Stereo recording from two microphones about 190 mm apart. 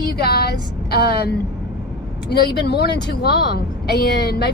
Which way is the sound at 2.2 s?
60° left (ahead or behind).